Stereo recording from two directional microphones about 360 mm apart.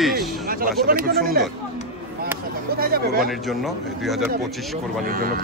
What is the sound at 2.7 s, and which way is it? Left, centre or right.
Speech, right.